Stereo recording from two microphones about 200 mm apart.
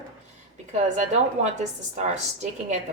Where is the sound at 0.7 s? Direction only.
35° right (ahead or behind).